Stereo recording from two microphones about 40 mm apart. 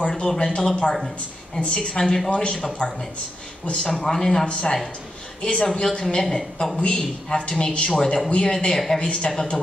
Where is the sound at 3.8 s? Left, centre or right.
Centre.